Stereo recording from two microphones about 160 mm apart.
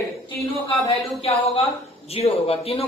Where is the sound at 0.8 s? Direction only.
40° left (ahead or behind).